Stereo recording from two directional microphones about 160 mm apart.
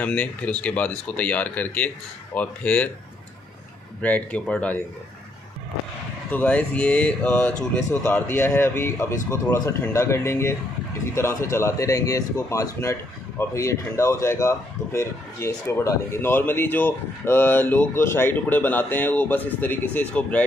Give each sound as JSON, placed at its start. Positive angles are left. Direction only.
{"t": 0.0, "sound": "speech", "side_deg": 10}
{"t": 4.0, "sound": "speech", "side_deg": 10}
{"t": 6.3, "sound": "a man's voice", "side_deg": 10}